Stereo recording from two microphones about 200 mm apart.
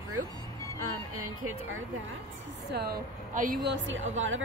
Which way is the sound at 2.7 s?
50° right (ahead or behind).